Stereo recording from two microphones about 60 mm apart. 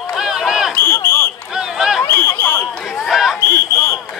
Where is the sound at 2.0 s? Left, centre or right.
Left.